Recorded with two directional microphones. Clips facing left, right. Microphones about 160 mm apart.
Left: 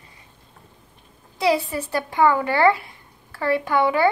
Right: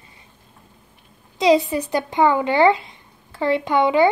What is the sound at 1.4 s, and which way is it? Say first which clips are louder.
Speech: right 5 dB; 20° right (ahead or behind).